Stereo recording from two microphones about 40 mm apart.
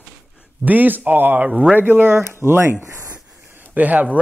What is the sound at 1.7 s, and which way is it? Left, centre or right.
Speech, right.